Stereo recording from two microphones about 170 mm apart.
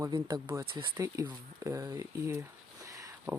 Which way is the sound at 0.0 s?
25° right (ahead or behind).